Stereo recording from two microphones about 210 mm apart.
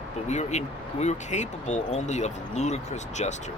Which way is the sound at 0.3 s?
35° left (ahead or behind).